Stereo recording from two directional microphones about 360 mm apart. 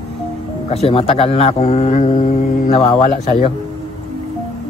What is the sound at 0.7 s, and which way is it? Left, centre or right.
Speech, centre.